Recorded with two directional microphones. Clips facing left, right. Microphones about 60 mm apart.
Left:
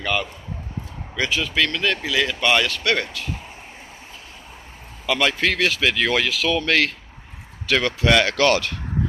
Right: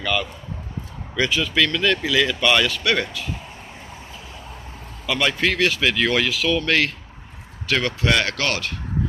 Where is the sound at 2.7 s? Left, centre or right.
Left.